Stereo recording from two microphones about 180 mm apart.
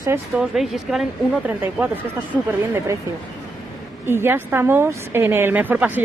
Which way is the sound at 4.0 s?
15° right (ahead or behind).